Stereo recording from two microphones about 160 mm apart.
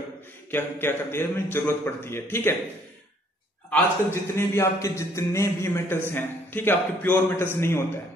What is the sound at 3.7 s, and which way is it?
A man's voice, 15° left (ahead or behind).